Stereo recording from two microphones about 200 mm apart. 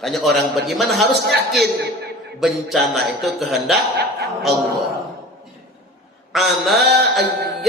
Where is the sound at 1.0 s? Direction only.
55° right (ahead or behind).